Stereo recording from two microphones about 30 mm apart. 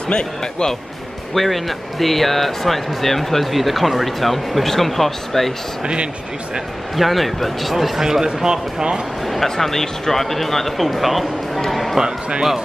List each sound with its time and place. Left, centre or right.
0.1 s speech: left
1.3 s speech: centre
7.0 s speech: centre
8.0 s speech: centre
9.2 s speech: centre
11.7 s a sound: centre